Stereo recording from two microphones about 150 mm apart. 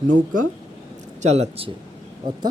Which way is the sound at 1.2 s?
45° right (ahead or behind).